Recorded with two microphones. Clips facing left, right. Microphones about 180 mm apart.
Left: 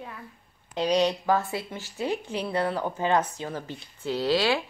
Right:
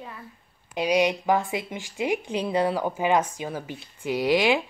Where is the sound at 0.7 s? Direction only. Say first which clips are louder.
Right 1 dB; 10° right (ahead or behind).